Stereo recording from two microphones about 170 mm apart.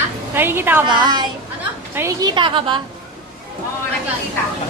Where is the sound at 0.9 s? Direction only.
25° right (ahead or behind).